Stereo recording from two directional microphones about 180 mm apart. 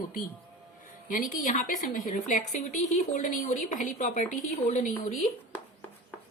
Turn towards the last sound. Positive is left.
turn(degrees=50)  # may be behind; listen again after turning